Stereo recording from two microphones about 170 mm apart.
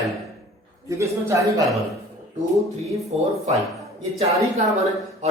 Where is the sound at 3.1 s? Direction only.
40° right (ahead or behind).